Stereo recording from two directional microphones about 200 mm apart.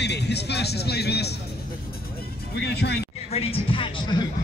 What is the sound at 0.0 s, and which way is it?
Speech, 55° left (ahead or behind).